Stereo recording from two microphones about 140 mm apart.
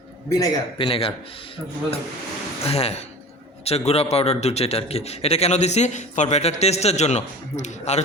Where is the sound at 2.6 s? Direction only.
45° left (ahead or behind).